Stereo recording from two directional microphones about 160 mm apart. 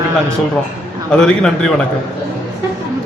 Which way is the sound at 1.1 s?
5° left (ahead or behind).